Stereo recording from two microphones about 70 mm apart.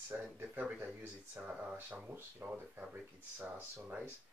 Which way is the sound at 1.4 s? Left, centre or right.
Right.